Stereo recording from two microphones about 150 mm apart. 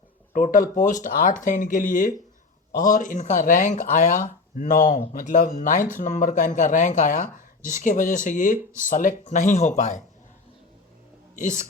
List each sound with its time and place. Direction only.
0.3 s speech: 60° left (ahead or behind)
11.3 s speech: 55° left (ahead or behind)